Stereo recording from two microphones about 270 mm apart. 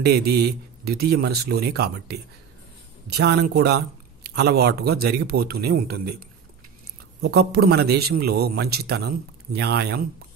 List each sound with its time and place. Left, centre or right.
0.0 s speech: right